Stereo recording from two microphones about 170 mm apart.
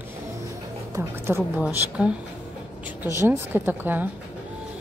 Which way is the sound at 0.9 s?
15° right (ahead or behind).